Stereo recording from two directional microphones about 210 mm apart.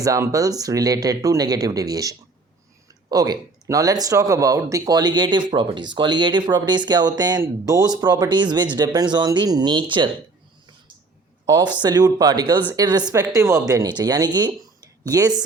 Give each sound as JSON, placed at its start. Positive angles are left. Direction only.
{"t": 0.0, "sound": "speech", "side_deg": -15}
{"t": 11.4, "sound": "speech", "side_deg": -20}